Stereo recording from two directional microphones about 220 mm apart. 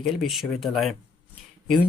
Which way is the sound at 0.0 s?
Centre (ahead or behind).